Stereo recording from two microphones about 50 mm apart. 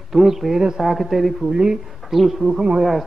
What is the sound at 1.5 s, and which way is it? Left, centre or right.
Speech, centre.